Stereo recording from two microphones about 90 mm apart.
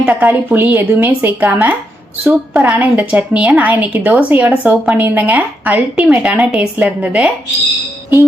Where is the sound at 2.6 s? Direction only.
20° right (ahead or behind).